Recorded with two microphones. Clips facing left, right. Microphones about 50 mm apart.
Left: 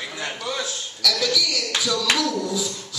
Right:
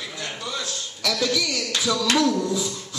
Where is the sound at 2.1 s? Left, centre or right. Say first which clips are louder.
Right 3 dB; right.